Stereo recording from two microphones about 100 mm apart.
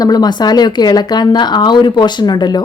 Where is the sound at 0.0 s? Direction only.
40° left (ahead or behind).